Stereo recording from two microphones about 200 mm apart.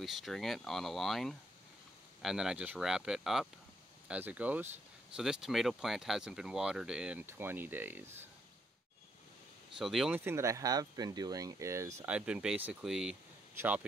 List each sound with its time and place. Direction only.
0.0 s speech: centre (ahead or behind)
9.8 s speech: centre (ahead or behind)